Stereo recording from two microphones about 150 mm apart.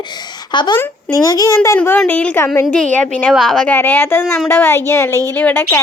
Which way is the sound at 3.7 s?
15° left (ahead or behind).